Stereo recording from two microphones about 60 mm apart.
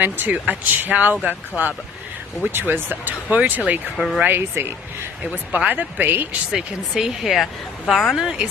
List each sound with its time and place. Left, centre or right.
0.0 s speech: right
2.5 s speech: right
3.9 s speech: centre
4.4 s speech: right
5.7 s speech: right
6.5 s speech: centre